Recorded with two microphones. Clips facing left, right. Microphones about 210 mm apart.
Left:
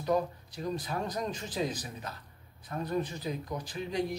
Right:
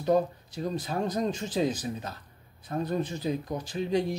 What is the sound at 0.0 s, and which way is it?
Speech, 25° right (ahead or behind).